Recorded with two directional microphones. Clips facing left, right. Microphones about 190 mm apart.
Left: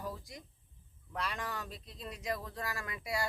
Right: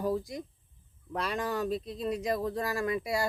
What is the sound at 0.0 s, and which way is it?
Speech, 40° right (ahead or behind).